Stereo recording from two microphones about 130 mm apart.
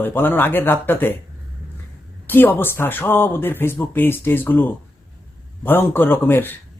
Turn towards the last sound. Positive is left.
turn(degrees=15)  # may be behind; listen again after turning